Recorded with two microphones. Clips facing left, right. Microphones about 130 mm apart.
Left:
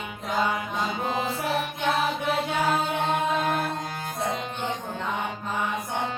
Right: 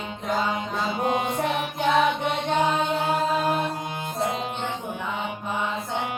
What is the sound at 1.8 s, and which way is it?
Music, 5° left (ahead or behind).